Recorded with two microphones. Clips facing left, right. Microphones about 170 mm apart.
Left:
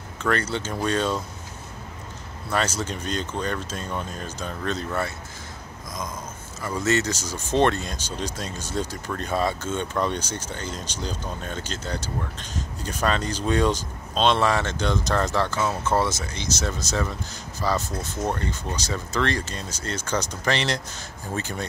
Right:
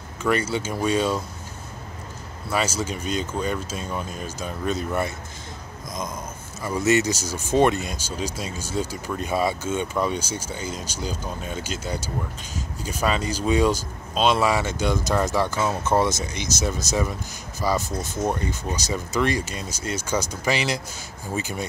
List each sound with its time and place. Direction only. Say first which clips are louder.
0.2 s speech: right 2 dB; 10° right (ahead or behind)
2.5 s speech: right 1 dB; 5° right (ahead or behind)
6.6 s speech: right 3 dB; 10° right (ahead or behind)
17.6 s speech: right 2 dB; 10° right (ahead or behind)